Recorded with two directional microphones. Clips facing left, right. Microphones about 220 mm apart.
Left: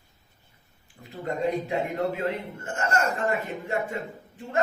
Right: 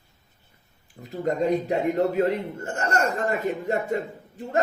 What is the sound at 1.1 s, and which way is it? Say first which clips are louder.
A man's voice: right 4 dB; 40° right (ahead or behind).